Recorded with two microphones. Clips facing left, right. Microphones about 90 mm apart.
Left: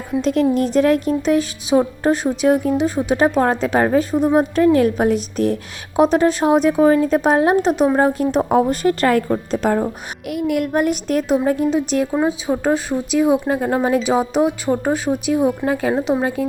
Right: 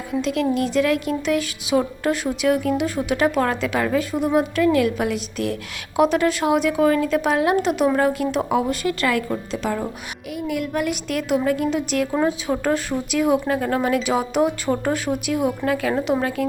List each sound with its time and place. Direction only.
0.2 s speech: 40° left (ahead or behind)
10.2 s a child's voice: 60° left (ahead or behind)
10.7 s speech: 40° left (ahead or behind); by 16.5 s 20° left (ahead or behind)